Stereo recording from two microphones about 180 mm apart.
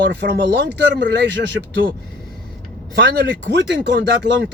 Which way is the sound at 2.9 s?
75° right (ahead or behind).